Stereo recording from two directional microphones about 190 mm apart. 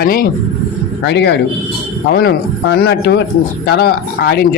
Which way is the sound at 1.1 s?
65° left (ahead or behind).